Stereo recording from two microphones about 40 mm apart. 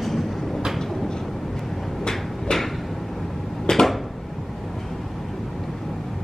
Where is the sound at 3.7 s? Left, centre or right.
Centre.